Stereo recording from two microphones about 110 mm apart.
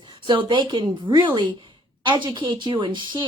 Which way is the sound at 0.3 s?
45° right (ahead or behind).